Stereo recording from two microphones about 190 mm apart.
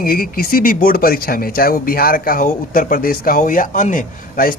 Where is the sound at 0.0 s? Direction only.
50° left (ahead or behind).